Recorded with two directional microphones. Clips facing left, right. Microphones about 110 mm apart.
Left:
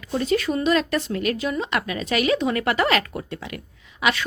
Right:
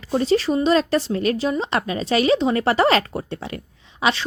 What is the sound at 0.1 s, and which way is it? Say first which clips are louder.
A woman's voice: right 3 dB; 30° right (ahead or behind).